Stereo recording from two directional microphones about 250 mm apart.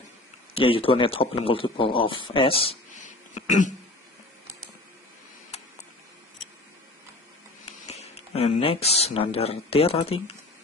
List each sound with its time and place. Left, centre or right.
0.6 s a man's voice: left
7.8 s speech: left